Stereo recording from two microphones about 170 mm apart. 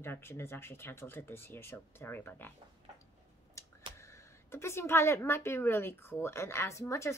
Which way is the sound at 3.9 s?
15° left (ahead or behind).